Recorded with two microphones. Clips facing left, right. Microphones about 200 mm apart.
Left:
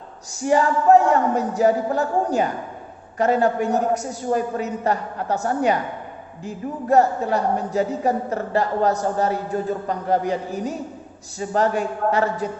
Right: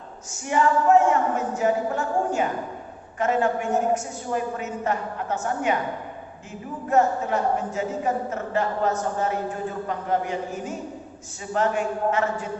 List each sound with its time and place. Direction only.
0.4 s speech: 35° left (ahead or behind)